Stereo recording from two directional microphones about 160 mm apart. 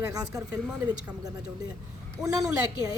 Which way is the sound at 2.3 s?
25° right (ahead or behind).